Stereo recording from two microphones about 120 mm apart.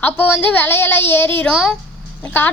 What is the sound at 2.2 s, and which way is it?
Speech, 15° left (ahead or behind).